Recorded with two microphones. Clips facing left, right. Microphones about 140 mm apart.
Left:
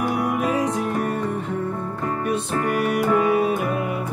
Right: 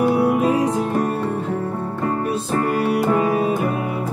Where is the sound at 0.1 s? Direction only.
30° right (ahead or behind).